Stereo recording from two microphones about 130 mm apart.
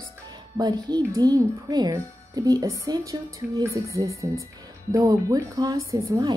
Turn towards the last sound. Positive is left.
turn(degrees=-30)  # may be behind; listen again after turning